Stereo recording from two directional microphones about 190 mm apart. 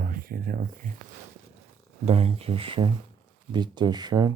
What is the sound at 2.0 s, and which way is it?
Speech, 30° right (ahead or behind).